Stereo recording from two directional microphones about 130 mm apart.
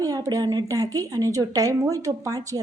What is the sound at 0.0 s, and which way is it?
A woman's voice, 25° right (ahead or behind).